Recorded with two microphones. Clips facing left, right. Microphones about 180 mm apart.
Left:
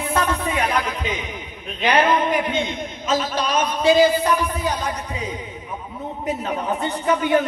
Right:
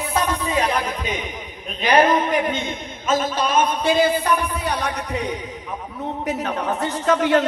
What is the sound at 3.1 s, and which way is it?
A man's voice, 50° right (ahead or behind).